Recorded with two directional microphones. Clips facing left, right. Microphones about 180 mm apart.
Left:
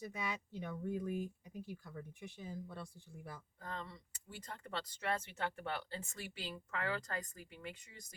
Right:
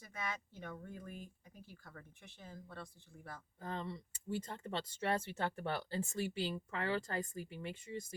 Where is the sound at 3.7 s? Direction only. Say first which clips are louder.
Right 4 dB; 25° right (ahead or behind).